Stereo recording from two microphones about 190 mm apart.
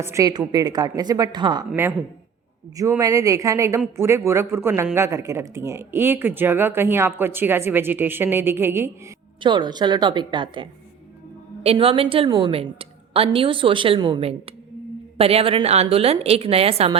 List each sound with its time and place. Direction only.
0.0 s a woman's voice: 15° right (ahead or behind)
1.7 s speech: 10° right (ahead or behind)
9.4 s a woman's voice: 25° right (ahead or behind)